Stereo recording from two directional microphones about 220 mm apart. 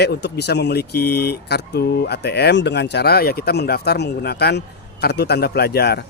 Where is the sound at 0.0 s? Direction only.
50° left (ahead or behind).